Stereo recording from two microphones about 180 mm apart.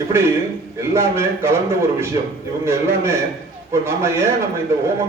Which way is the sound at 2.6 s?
15° right (ahead or behind).